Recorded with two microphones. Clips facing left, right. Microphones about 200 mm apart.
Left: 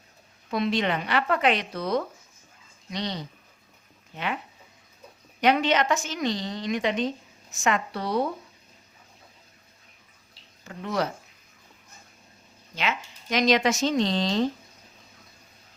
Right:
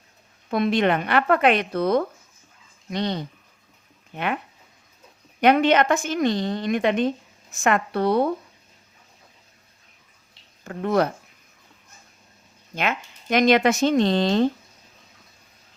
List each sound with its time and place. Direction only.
0.5 s speech: 55° right (ahead or behind)
5.4 s speech: 55° right (ahead or behind)
10.6 s speech: 55° right (ahead or behind)
12.7 s speech: 55° right (ahead or behind)